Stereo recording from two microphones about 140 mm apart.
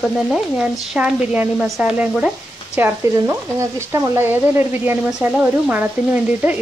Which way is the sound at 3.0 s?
20° right (ahead or behind).